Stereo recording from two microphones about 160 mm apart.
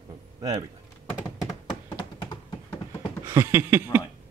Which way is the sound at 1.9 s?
30° left (ahead or behind).